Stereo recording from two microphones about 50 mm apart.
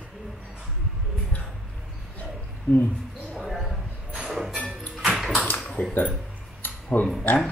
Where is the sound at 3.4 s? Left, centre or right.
Centre.